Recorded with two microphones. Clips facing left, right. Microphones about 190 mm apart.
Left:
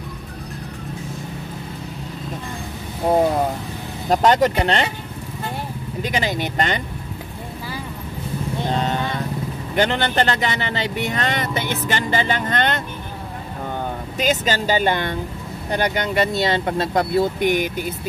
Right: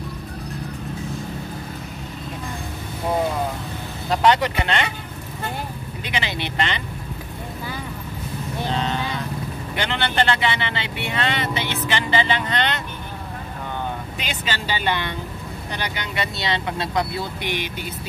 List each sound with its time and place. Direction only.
4.1 s speech: 45° left (ahead or behind)
6.0 s speech: 40° left (ahead or behind)
8.6 s vehicle: 45° left (ahead or behind)
9.8 s speech: 40° left (ahead or behind)
14.1 s speech: 40° left (ahead or behind)